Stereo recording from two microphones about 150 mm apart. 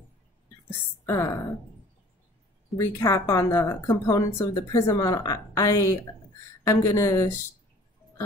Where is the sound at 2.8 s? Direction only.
20° left (ahead or behind).